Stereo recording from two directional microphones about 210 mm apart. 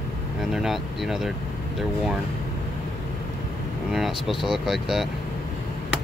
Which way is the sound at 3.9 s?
Centre (ahead or behind).